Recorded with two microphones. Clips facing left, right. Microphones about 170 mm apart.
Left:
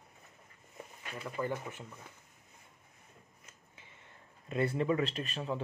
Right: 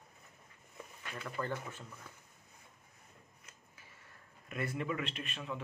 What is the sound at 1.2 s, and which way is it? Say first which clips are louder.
Speech: left 3 dB; 15° left (ahead or behind).